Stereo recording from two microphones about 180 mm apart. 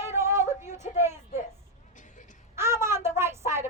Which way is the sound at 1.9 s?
45° left (ahead or behind).